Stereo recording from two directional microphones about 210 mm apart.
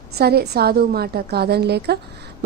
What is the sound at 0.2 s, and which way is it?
A woman's voice, 50° right (ahead or behind).